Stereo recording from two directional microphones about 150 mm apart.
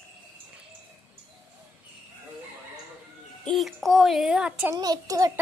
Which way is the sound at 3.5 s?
Centre (ahead or behind).